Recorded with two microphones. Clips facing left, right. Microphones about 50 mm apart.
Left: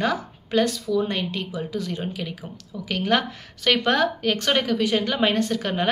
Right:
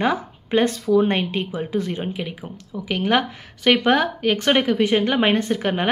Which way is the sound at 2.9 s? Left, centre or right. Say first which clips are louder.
Right 2 dB; centre.